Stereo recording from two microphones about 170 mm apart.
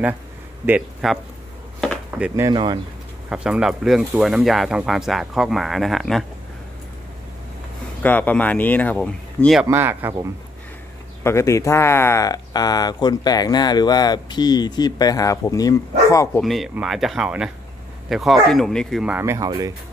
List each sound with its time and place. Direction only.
0.7 s speech: 5° right (ahead or behind)
1.8 s a sound: centre (ahead or behind)
2.5 s speech: 30° right (ahead or behind)
3.3 s speech: 5° right (ahead or behind)
8.0 s speech: 10° left (ahead or behind)
9.6 s speech: 15° right (ahead or behind)
11.2 s speech: 15° left (ahead or behind)
16.3 s speech: centre (ahead or behind)
19.1 s speech: 15° right (ahead or behind)